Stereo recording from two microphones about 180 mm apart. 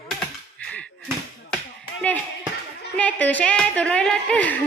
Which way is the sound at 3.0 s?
10° left (ahead or behind).